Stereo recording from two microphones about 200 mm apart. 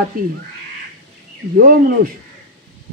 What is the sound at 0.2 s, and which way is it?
Speech, 45° right (ahead or behind).